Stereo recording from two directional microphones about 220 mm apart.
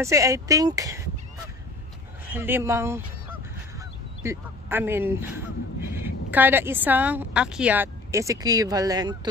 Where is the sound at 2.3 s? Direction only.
10° right (ahead or behind).